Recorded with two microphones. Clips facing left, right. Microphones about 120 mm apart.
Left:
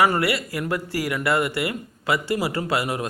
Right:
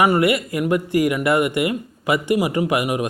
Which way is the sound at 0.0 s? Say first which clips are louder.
Right 4 dB; 20° right (ahead or behind).